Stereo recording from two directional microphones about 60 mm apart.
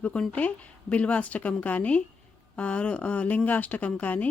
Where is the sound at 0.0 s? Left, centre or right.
Left.